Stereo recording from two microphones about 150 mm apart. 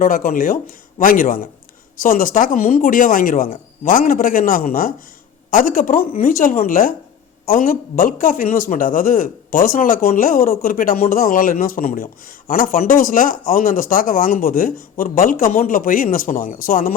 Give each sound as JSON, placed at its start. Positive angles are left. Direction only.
{"t": 0.0, "sound": "a man's voice", "side_deg": 60}